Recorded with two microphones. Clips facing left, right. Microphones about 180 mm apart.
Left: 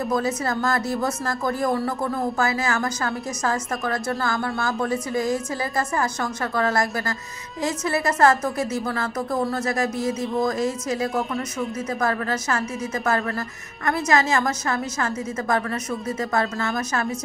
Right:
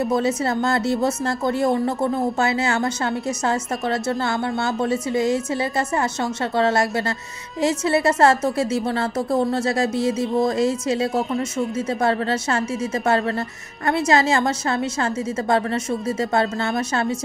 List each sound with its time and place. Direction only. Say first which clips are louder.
0.1 s speech: right 3 dB; 25° right (ahead or behind)